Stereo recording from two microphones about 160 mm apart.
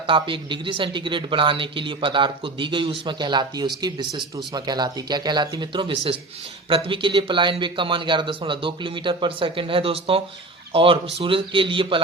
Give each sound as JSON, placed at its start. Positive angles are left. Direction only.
{"t": 0.1, "sound": "speech", "side_deg": -30}